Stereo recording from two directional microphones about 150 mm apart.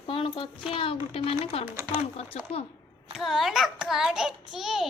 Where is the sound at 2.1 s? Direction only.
45° left (ahead or behind).